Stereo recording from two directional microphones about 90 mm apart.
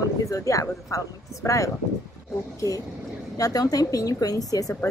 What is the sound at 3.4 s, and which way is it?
A woman's voice, 40° left (ahead or behind).